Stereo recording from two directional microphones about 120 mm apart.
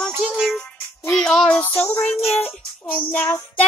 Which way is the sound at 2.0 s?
60° left (ahead or behind).